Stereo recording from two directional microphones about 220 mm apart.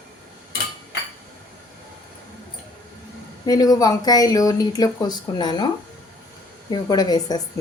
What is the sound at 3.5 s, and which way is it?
Speech, 15° left (ahead or behind).